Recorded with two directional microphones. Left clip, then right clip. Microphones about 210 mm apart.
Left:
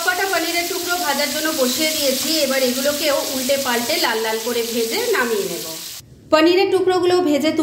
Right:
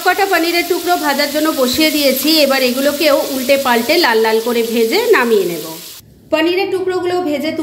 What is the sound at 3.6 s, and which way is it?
Stir, 35° right (ahead or behind).